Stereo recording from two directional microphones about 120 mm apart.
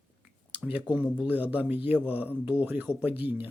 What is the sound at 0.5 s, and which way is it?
Speech, 10° right (ahead or behind).